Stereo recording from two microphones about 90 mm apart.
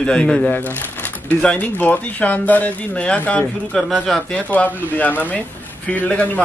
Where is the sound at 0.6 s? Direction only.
20° left (ahead or behind).